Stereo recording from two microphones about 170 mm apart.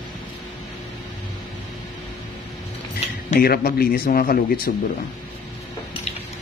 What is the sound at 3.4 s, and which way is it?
A man's voice, 60° left (ahead or behind).